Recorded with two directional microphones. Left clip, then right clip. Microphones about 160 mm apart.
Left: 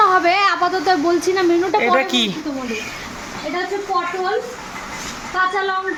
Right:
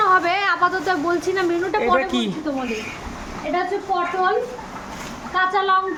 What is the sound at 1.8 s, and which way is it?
Speech, centre (ahead or behind).